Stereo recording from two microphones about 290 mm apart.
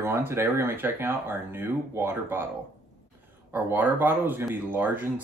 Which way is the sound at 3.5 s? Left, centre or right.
Centre.